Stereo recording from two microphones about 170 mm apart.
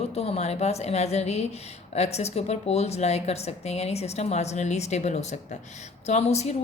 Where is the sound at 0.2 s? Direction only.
40° left (ahead or behind).